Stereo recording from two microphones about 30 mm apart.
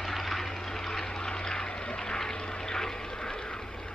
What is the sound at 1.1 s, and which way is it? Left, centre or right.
Aircraft, left.